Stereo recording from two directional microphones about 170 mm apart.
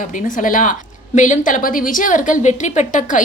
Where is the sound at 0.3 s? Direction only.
50° left (ahead or behind).